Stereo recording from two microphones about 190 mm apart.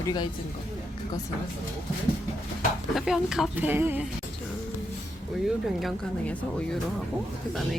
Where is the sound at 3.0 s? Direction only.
Centre (ahead or behind).